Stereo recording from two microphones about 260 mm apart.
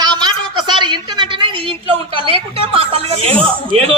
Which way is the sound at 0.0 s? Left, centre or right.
Centre.